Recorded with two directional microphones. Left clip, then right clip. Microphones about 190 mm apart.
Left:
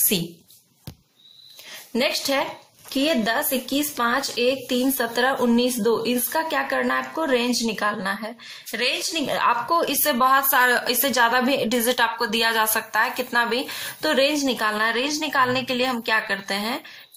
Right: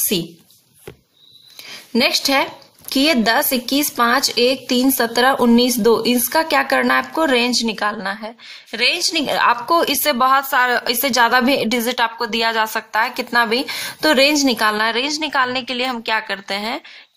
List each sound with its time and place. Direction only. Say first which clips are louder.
1.9 s a woman's voice: right 6 dB; 40° right (ahead or behind)